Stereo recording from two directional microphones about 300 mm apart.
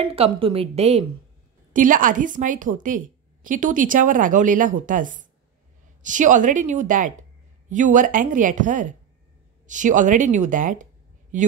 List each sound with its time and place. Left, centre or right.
0.0 s a woman's voice: centre